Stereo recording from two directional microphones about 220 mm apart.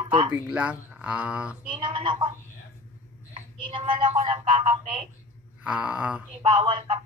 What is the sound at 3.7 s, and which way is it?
Speech, 25° right (ahead or behind).